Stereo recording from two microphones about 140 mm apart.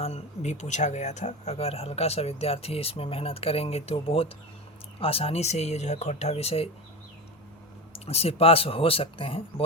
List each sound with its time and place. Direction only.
0.0 s speech: 55° left (ahead or behind)
7.9 s speech: 45° left (ahead or behind)